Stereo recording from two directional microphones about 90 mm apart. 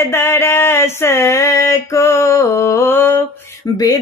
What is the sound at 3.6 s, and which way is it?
Music, 40° left (ahead or behind).